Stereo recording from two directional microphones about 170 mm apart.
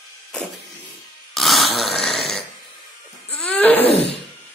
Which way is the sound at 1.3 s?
Centre (ahead or behind).